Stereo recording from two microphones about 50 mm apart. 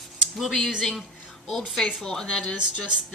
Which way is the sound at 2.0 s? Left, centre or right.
Centre.